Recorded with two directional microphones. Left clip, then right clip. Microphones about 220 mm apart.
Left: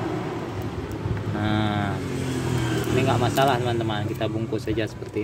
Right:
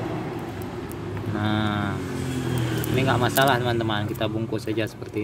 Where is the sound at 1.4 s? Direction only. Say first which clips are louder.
Even; 5° right (ahead or behind).